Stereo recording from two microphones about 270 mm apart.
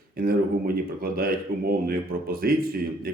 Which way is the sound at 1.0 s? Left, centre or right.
Right.